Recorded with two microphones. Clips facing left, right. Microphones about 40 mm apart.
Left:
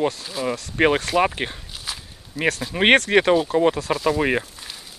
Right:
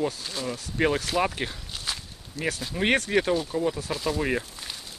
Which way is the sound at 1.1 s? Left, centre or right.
Left.